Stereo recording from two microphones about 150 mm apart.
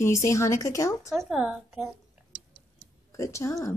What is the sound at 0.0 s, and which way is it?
Speech, 20° left (ahead or behind).